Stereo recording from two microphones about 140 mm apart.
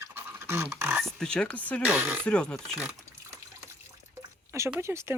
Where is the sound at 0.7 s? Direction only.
15° right (ahead or behind).